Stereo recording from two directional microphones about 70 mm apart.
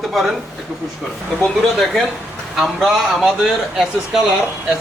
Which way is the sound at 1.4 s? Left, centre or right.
Centre.